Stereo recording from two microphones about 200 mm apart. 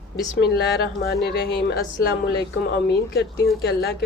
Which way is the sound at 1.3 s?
50° left (ahead or behind).